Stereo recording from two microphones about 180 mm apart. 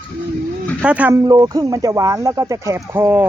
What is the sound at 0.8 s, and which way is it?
Speech, 5° right (ahead or behind).